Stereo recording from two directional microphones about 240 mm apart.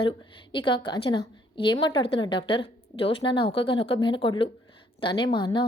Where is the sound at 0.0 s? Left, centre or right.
Centre.